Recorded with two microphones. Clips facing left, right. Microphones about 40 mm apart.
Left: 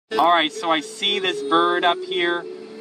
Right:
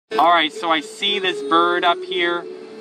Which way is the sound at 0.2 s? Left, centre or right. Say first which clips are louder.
Right 2 dB; centre.